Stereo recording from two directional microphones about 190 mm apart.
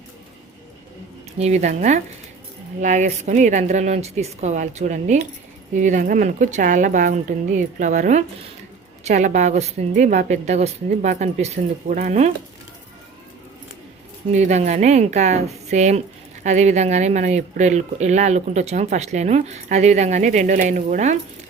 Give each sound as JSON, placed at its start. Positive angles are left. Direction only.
{"t": 1.4, "sound": "speech", "side_deg": -35}
{"t": 14.3, "sound": "speech", "side_deg": -40}